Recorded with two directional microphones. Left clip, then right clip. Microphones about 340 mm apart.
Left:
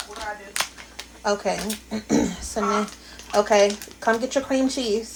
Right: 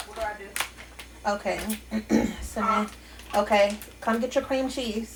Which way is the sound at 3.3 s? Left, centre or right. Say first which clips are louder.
Left 4 dB; left.